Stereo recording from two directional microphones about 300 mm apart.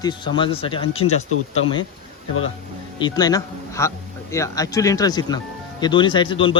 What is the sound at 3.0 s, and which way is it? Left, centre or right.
Speech, centre.